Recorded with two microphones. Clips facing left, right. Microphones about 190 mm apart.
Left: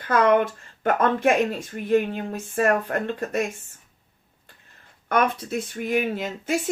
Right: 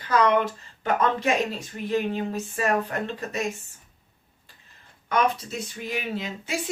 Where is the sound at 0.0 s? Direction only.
50° left (ahead or behind).